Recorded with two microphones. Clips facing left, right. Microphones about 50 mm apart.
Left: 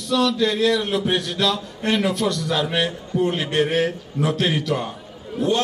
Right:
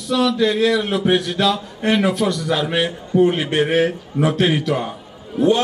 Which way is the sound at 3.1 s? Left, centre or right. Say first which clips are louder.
Right 8 dB; right.